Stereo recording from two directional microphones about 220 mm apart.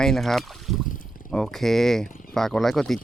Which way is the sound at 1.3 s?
Centre (ahead or behind).